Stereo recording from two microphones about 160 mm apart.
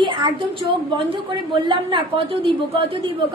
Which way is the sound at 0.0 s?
30° right (ahead or behind).